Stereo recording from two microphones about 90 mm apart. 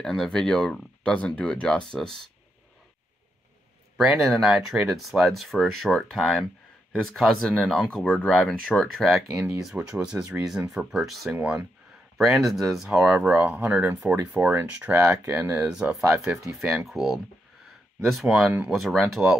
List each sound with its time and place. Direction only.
0.0 s speech: 5° left (ahead or behind)
3.9 s speech: 5° right (ahead or behind)
9.5 s speech: 10° right (ahead or behind)
10.9 s speech: 5° right (ahead or behind)